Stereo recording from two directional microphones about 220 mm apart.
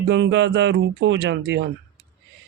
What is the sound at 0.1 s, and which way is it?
Speech, 55° right (ahead or behind).